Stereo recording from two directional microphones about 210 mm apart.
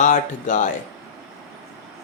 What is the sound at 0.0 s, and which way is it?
Speech, 35° left (ahead or behind).